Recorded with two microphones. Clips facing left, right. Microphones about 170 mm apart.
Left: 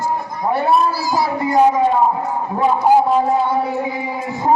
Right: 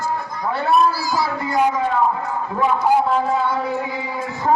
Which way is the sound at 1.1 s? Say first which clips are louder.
Left 4 dB; 20° left (ahead or behind).